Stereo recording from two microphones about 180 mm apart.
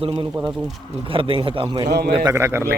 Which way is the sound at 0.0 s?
30° right (ahead or behind).